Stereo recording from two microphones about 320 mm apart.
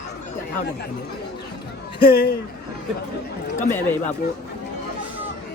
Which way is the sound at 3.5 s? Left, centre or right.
Left.